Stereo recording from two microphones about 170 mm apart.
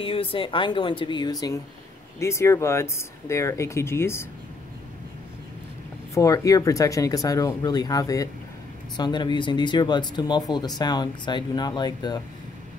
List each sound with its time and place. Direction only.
0.0 s speech: 30° left (ahead or behind); by 4.3 s 15° left (ahead or behind)
6.1 s speech: 20° left (ahead or behind)